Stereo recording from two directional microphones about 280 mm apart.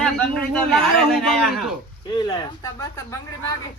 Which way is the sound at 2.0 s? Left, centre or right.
Centre.